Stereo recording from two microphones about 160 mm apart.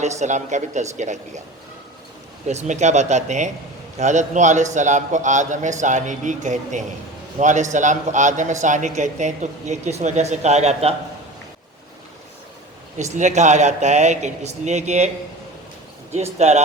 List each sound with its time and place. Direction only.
0.0 s a man's voice: 45° right (ahead or behind)
2.5 s a man's voice: 45° right (ahead or behind)
13.1 s a man's voice: 45° right (ahead or behind)
16.1 s a man's voice: 40° right (ahead or behind)